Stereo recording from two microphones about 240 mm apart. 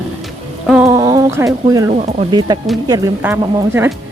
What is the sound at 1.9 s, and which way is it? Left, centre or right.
Speech, right.